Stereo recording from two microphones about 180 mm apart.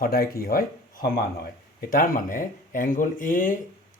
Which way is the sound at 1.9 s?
50° left (ahead or behind).